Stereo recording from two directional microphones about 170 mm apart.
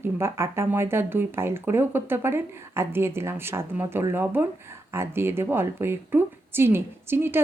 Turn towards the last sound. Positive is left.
turn(degrees=-15)  # may be behind; listen again after turning